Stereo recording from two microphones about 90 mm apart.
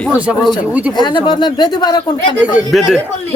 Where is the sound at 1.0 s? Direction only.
55° left (ahead or behind).